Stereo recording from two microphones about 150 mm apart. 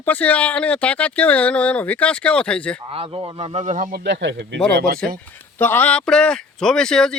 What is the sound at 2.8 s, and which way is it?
Speech, 40° right (ahead or behind).